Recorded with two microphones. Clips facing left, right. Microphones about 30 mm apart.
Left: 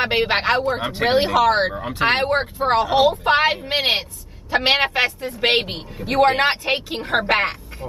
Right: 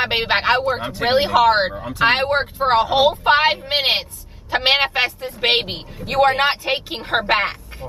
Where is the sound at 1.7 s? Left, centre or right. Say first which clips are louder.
Left 1 dB; centre.